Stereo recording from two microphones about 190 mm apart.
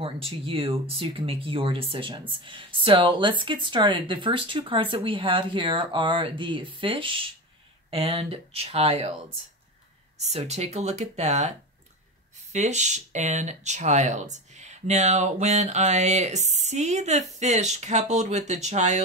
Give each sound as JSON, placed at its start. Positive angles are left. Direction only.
{"t": 0.0, "sound": "speech", "side_deg": -30}
{"t": 10.1, "sound": "speech", "side_deg": -35}
{"t": 12.5, "sound": "speech", "side_deg": -40}